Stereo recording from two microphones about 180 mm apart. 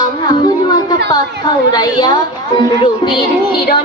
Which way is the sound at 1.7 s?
20° left (ahead or behind).